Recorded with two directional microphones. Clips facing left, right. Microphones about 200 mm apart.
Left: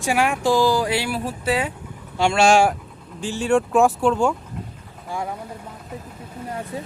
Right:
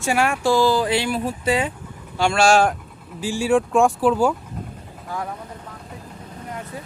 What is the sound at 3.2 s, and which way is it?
Speech, 10° right (ahead or behind).